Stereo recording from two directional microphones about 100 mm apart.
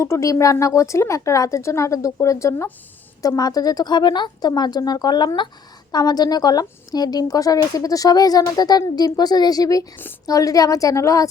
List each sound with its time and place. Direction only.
0.0 s speech: 30° left (ahead or behind)